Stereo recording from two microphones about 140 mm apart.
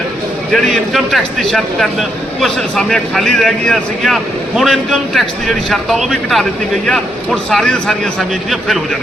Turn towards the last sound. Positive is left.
turn(degrees=5)  # may be behind; listen again after turning